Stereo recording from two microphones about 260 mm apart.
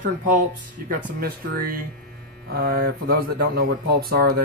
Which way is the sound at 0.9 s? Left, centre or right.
Right.